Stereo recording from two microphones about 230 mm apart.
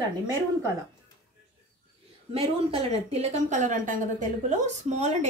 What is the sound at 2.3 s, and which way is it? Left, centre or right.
Speech, right.